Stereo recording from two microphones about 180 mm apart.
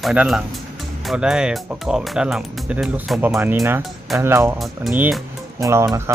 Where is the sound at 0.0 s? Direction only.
5° right (ahead or behind).